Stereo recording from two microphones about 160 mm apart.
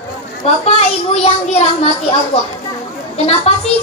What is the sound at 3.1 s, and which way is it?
Speech, 40° left (ahead or behind).